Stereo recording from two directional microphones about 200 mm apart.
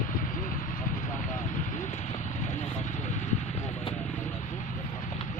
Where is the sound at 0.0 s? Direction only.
40° left (ahead or behind).